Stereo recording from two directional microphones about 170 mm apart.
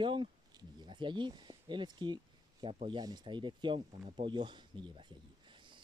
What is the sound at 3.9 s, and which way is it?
Speech, 40° right (ahead or behind).